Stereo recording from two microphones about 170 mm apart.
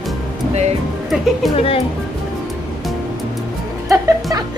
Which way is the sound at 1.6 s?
35° left (ahead or behind).